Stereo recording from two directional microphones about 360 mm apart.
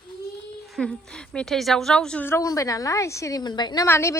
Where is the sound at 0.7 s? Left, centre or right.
Centre.